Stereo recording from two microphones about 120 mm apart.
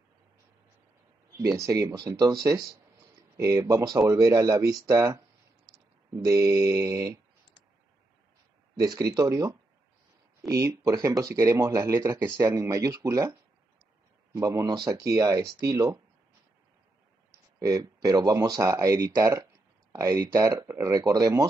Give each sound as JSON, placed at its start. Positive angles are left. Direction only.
{"t": 1.4, "sound": "speech", "side_deg": -30}
{"t": 8.7, "sound": "speech", "side_deg": -30}
{"t": 14.3, "sound": "speech", "side_deg": -25}
{"t": 17.6, "sound": "speech", "side_deg": -30}